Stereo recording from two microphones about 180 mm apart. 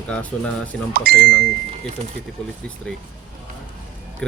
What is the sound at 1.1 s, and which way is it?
Speech, 55° right (ahead or behind).